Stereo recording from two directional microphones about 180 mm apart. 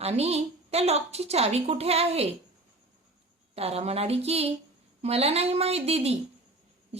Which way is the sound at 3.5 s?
35° right (ahead or behind).